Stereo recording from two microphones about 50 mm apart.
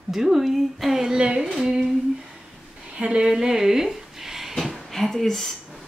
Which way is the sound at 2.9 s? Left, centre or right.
Centre.